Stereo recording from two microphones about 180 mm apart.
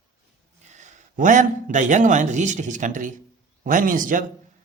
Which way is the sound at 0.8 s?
45° right (ahead or behind).